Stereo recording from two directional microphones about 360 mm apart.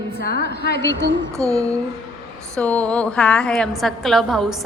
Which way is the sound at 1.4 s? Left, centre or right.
Centre.